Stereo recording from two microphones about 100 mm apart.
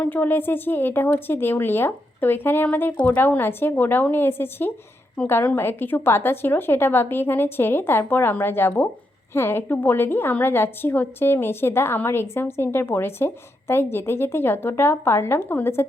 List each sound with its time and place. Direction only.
0.0 s a woman's voice: 20° left (ahead or behind)